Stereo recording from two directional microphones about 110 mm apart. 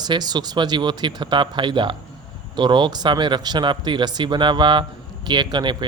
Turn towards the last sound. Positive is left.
turn(degrees=-40)  # may be behind; listen again after turning